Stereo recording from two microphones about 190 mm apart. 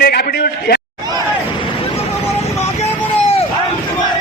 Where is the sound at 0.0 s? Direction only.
55° left (ahead or behind).